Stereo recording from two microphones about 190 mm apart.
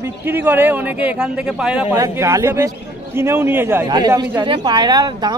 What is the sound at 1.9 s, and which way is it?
A man's voice, 15° right (ahead or behind).